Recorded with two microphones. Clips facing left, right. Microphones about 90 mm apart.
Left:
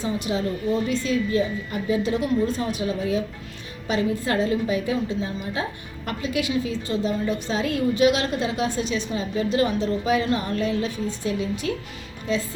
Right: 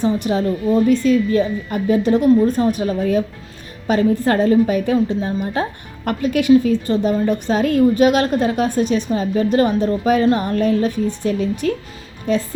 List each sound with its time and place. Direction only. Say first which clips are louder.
0.0 s a woman's voice: right 7 dB; 55° right (ahead or behind)